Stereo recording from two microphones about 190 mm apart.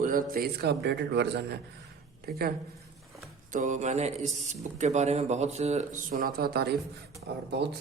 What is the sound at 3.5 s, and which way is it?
A man's voice, 40° right (ahead or behind).